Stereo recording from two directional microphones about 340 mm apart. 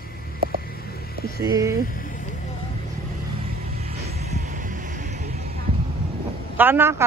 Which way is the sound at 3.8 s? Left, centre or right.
Right.